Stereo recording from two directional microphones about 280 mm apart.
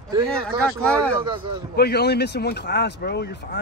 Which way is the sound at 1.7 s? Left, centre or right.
Left.